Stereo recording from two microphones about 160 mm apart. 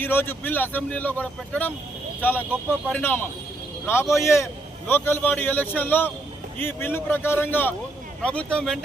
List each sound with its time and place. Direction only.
0.0 s speech: 15° left (ahead or behind)